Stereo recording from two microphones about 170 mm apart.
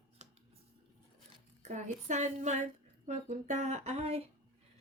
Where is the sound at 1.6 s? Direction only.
45° right (ahead or behind).